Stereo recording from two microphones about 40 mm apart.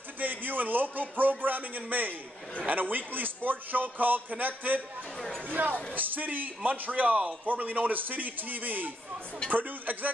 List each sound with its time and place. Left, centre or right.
0.2 s a man's voice: right